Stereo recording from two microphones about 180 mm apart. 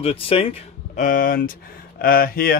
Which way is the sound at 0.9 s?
50° left (ahead or behind).